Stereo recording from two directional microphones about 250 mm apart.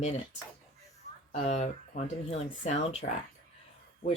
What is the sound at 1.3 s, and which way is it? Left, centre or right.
Speech, left.